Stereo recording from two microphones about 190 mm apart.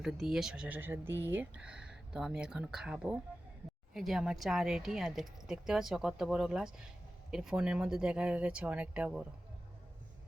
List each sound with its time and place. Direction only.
0.0 s speech: centre (ahead or behind)